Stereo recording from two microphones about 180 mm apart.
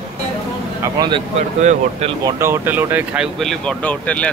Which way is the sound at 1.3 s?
35° right (ahead or behind).